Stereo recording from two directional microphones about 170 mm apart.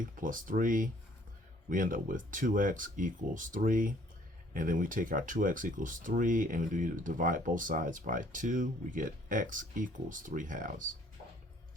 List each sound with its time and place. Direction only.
0.0 s speech: 50° right (ahead or behind)